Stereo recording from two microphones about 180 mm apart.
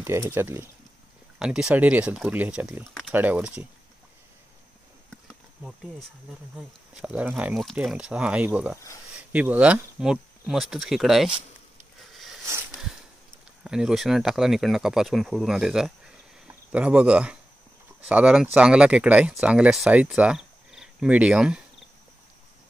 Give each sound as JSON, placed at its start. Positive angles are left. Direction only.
{"t": 0.0, "sound": "speech", "side_deg": -15}
{"t": 5.6, "sound": "speech", "side_deg": -5}
{"t": 12.0, "sound": "a sound", "side_deg": 0}
{"t": 13.7, "sound": "speech", "side_deg": -5}